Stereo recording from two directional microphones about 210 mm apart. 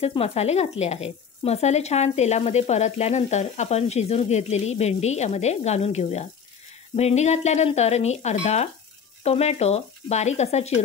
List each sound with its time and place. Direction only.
0.0 s speech: 30° left (ahead or behind)